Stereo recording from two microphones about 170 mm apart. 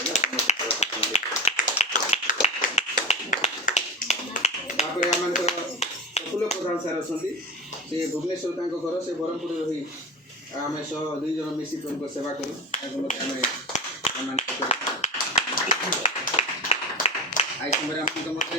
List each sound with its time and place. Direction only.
0.1 s tap: 40° left (ahead or behind)
5.5 s clapping: 40° left (ahead or behind)
13.1 s clapping: 45° left (ahead or behind)